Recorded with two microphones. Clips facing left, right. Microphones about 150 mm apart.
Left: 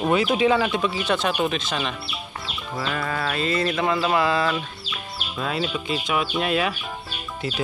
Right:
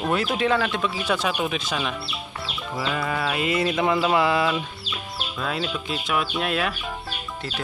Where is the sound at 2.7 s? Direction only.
5° right (ahead or behind).